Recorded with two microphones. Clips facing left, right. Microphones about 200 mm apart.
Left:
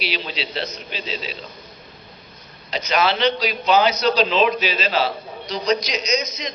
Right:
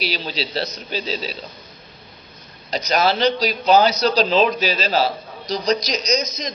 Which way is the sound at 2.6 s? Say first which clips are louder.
Right 1 dB; 40° right (ahead or behind).